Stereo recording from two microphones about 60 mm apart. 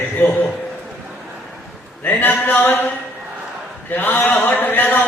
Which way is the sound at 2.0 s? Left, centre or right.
Left.